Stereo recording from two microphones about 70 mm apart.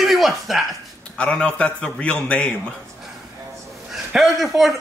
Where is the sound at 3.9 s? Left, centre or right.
Centre.